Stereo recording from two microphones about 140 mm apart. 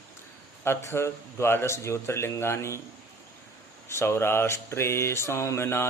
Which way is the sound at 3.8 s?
20° left (ahead or behind).